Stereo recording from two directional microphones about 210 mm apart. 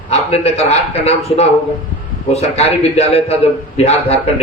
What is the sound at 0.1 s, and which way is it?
Speech, 30° left (ahead or behind).